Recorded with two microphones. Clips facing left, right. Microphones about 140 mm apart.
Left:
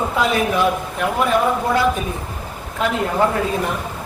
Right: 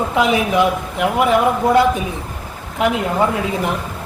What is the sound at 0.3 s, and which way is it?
Speech, 15° right (ahead or behind).